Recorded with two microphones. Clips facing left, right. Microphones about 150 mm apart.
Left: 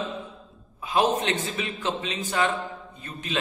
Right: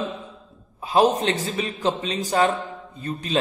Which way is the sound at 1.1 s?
35° right (ahead or behind).